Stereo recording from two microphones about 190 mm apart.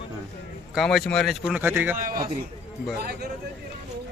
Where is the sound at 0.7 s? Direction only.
Centre (ahead or behind).